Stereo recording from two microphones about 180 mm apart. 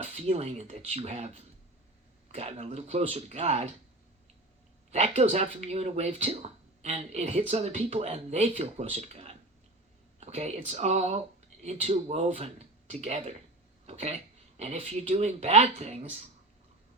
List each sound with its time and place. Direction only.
0.0 s speech: 35° right (ahead or behind)
4.9 s speech: 35° right (ahead or behind)